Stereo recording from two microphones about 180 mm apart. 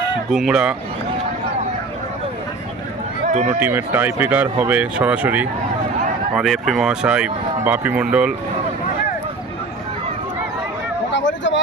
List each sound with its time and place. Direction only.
0.3 s speech: centre (ahead or behind)
3.2 s run: 40° right (ahead or behind)
3.6 s speech: 10° right (ahead or behind)
11.1 s vehicle: 90° left